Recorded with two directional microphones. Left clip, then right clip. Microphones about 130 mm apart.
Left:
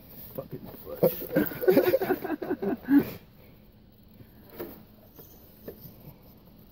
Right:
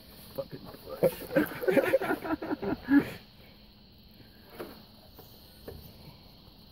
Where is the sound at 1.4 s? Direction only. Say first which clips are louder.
Left 4 dB; 25° left (ahead or behind).